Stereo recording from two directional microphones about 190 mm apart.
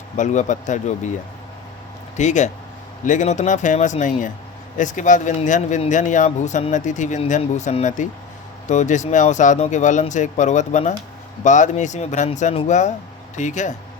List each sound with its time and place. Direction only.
0.2 s speech: 40° left (ahead or behind)
2.1 s speech: 40° left (ahead or behind)